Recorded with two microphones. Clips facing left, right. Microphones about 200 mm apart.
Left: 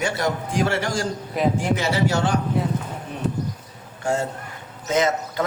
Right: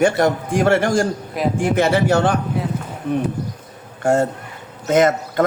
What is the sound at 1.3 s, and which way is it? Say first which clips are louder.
Speech: right 1 dB; centre (ahead or behind).